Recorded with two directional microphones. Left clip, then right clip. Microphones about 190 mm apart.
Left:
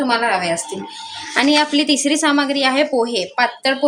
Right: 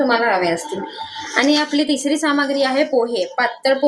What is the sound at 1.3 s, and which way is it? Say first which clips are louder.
A woman's voice: left 2 dB; 45° left (ahead or behind).